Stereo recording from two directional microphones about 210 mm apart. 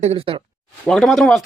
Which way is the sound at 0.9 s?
Centre (ahead or behind).